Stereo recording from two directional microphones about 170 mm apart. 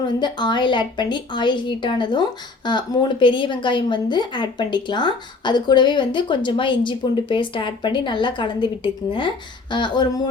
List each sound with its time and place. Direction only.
0.2 s a woman's voice: 25° left (ahead or behind)